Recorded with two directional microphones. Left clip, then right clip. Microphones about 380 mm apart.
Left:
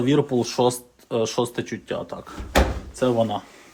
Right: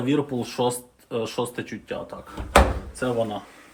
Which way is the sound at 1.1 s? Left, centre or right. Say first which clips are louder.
Left 4 dB; left.